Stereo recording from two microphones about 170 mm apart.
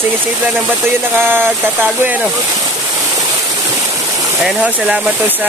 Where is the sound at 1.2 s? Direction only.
15° right (ahead or behind).